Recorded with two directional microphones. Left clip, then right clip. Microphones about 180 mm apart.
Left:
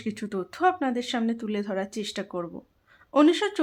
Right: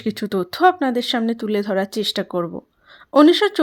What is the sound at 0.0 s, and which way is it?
Speech, 40° right (ahead or behind).